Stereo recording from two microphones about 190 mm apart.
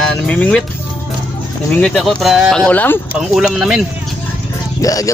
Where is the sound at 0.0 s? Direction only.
5° left (ahead or behind).